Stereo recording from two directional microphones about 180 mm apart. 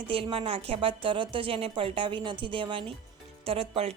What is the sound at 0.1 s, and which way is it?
A woman's voice, 30° right (ahead or behind).